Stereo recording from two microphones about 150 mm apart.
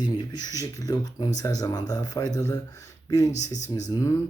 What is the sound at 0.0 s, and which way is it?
Speech, 25° left (ahead or behind).